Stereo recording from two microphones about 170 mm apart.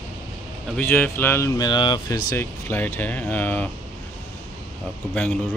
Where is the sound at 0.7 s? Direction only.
10° left (ahead or behind).